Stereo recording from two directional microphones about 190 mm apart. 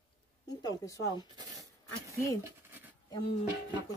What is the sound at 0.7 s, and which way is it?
Speech, 20° left (ahead or behind).